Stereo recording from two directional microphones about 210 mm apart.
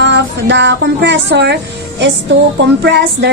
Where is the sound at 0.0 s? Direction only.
55° right (ahead or behind).